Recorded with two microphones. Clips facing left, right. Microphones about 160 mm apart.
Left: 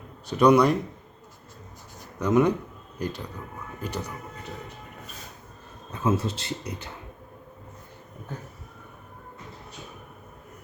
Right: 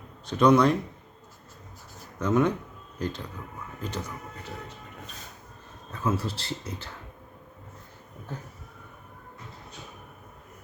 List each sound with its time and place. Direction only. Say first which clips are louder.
0.3 s speech: left 1 dB; 10° left (ahead or behind)
2.1 s speech: left 3 dB; 10° left (ahead or behind)
5.9 s speech: left 3 dB; 25° left (ahead or behind)